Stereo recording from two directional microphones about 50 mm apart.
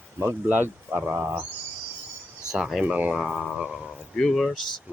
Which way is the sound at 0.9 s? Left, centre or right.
Right.